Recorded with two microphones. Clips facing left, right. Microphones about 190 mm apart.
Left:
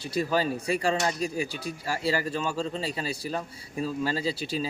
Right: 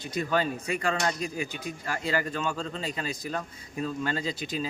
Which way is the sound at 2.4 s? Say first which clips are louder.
Left 2 dB; 10° left (ahead or behind).